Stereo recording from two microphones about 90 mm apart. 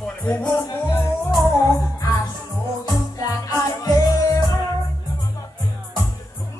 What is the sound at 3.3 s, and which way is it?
Music, 40° left (ahead or behind).